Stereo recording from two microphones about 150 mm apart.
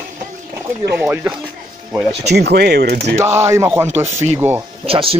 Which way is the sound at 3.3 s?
15° right (ahead or behind).